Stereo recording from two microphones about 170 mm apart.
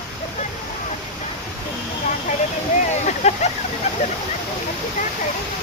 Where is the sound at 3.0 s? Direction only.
40° left (ahead or behind).